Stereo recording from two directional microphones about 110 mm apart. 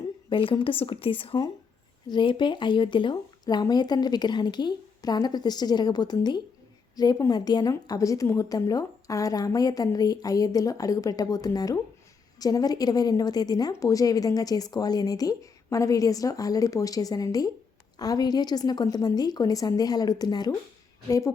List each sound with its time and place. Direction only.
0.3 s a woman's voice: 50° left (ahead or behind); by 21.3 s 30° left (ahead or behind)